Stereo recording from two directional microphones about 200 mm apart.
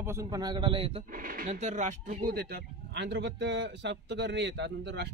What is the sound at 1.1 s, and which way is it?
Speech, 45° right (ahead or behind).